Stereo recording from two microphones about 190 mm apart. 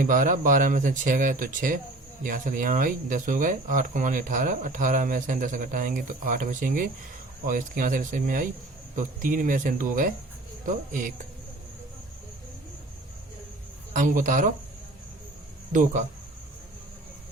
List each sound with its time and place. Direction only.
0.0 s speech: 45° right (ahead or behind)
13.9 s speech: 45° right (ahead or behind)
15.7 s speech: 45° right (ahead or behind)